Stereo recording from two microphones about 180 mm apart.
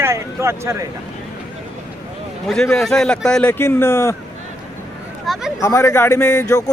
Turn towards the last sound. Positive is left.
turn(degrees=15)  # may be behind; listen again after turning